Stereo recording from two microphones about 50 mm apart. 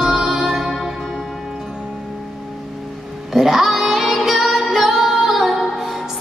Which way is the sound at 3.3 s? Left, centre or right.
Centre.